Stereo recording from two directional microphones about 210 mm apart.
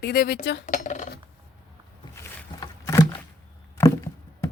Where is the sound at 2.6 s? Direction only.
15° left (ahead or behind).